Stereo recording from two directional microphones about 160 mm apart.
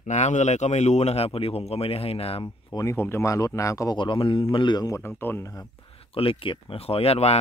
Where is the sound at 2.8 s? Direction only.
15° left (ahead or behind).